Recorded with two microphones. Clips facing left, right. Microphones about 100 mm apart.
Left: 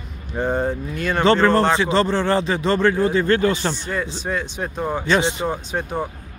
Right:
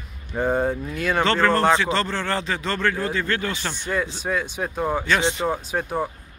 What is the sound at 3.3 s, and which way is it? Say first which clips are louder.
Speech: left 8 dB; 30° left (ahead or behind).